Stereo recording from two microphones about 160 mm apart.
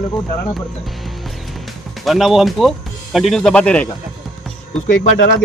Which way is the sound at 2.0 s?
Centre (ahead or behind).